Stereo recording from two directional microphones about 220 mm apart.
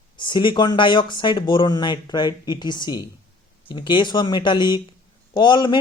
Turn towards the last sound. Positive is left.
turn(degrees=20)  # may be behind; listen again after turning